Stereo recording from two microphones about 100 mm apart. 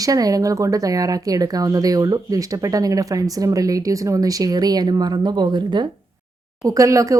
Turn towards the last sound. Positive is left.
turn(degrees=-30)  # may be behind; listen again after turning